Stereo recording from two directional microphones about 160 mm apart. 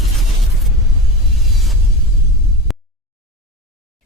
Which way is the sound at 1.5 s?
Centre (ahead or behind).